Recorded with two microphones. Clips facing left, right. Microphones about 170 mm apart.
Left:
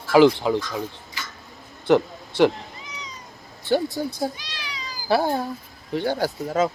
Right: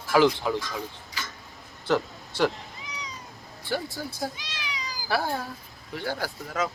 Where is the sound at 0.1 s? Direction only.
20° left (ahead or behind).